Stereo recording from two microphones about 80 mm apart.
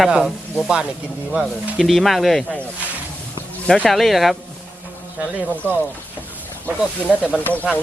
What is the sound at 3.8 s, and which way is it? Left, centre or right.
Speech, centre.